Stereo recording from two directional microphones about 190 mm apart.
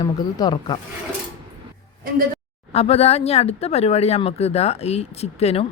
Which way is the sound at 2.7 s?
30° left (ahead or behind).